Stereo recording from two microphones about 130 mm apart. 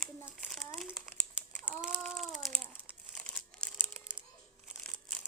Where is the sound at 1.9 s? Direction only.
Centre (ahead or behind).